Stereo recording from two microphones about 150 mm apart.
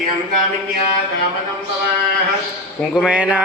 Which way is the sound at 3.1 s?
10° right (ahead or behind).